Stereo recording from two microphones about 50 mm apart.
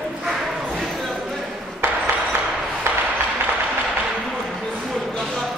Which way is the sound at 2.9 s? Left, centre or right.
Right.